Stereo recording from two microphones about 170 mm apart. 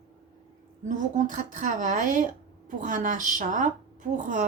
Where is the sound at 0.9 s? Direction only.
45° right (ahead or behind).